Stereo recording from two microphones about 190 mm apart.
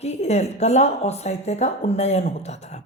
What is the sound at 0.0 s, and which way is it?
Speech, 35° left (ahead or behind).